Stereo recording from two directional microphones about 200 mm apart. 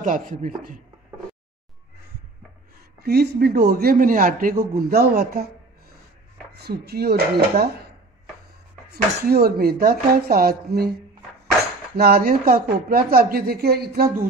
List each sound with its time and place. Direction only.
0.0 s speech: 40° right (ahead or behind)
3.0 s a man's voice: 55° right (ahead or behind)
6.5 s a man's voice: 55° right (ahead or behind)
8.9 s a man's voice: 50° right (ahead or behind)
12.0 s a man's voice: 50° right (ahead or behind)